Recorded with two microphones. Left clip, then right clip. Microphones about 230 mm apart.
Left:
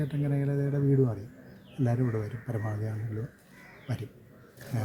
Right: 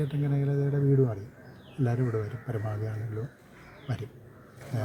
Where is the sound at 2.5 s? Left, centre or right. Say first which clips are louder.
Even; centre.